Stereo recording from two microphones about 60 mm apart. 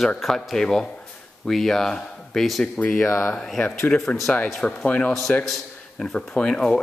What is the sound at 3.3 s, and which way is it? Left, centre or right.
Speech, centre.